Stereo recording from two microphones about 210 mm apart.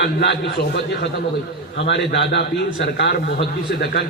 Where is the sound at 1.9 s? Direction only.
55° left (ahead or behind).